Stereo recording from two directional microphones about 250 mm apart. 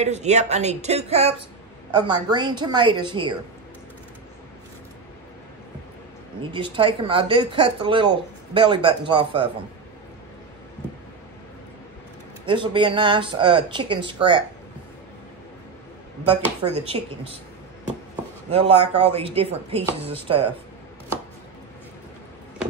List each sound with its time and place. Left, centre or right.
0.0 s speech: right
6.4 s speech: centre
12.4 s speech: centre
16.6 s speech: right
18.5 s speech: right